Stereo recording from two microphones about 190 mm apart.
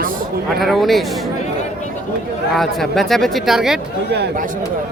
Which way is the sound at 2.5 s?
Centre (ahead or behind).